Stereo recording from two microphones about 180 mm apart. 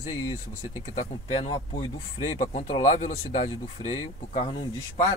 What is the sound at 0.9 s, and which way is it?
Speech, 30° left (ahead or behind).